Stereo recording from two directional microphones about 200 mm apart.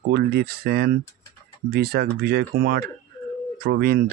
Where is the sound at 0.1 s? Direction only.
50° right (ahead or behind).